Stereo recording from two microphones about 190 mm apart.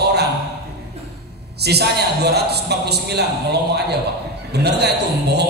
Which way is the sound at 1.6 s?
60° right (ahead or behind).